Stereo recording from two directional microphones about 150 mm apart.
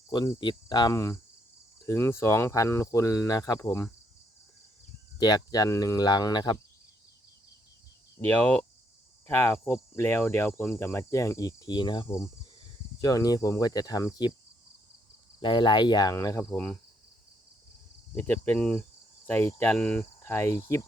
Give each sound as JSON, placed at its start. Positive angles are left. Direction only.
{"t": 0.1, "sound": "speech", "side_deg": 30}
{"t": 5.2, "sound": "speech", "side_deg": 25}
{"t": 8.2, "sound": "cricket", "side_deg": 10}
{"t": 12.0, "sound": "speech", "side_deg": 20}
{"t": 15.4, "sound": "speech", "side_deg": 30}
{"t": 18.1, "sound": "cricket", "side_deg": 10}
{"t": 20.1, "sound": "speech", "side_deg": 15}